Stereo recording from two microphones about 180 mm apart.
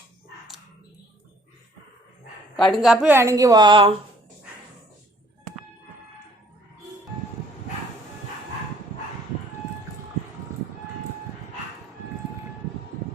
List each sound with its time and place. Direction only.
2.6 s a woman's voice: centre (ahead or behind); by 3.9 s 25° right (ahead or behind)